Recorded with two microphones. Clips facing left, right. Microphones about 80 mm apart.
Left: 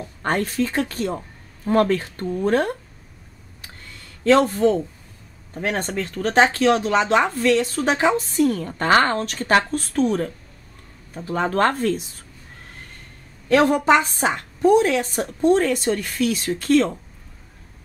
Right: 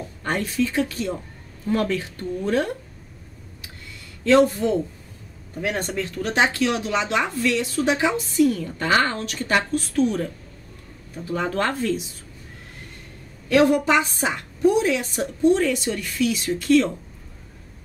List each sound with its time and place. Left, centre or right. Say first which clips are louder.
0.2 s a woman's voice: left 2 dB; left
4.2 s a woman's voice: left 1 dB; left
13.5 s speech: left 2 dB; left